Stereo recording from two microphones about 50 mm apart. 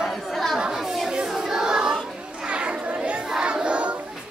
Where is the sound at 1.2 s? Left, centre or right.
Centre.